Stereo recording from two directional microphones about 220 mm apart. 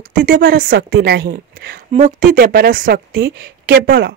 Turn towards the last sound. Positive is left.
turn(degrees=-45)  # may be behind; listen again after turning